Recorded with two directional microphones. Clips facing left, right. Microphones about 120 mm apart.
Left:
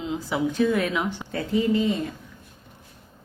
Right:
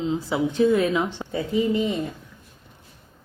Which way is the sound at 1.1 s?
20° right (ahead or behind).